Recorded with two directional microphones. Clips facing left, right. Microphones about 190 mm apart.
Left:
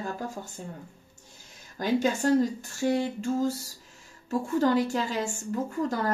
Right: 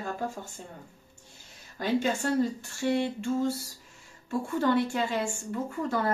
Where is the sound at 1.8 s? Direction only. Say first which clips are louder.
Left 2 dB; 40° left (ahead or behind).